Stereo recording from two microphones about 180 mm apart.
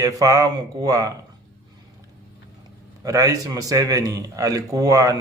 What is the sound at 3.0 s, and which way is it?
A man's voice, 20° right (ahead or behind).